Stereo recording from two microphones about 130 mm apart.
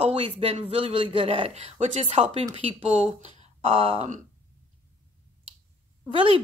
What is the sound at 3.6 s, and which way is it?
Speech, 45° right (ahead or behind).